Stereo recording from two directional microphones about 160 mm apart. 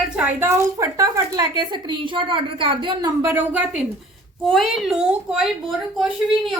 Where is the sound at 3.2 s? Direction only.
10° right (ahead or behind).